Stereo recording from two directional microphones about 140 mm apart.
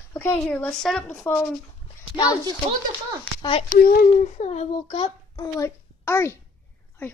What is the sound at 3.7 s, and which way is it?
Speech, 90° left.